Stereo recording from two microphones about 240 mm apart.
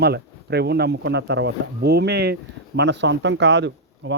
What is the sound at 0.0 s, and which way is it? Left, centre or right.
Speech, right.